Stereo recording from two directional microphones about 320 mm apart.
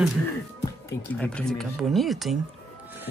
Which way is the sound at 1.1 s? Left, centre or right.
Centre.